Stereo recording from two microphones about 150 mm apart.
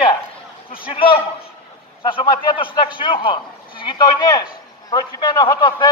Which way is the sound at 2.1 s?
35° left (ahead or behind).